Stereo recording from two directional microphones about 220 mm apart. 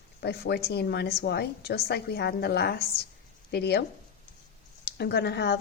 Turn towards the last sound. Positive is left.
turn(degrees=50)  # may be behind; listen again after turning